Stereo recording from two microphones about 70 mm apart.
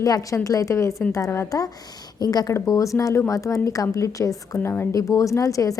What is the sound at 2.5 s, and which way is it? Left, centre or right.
A woman's voice, left.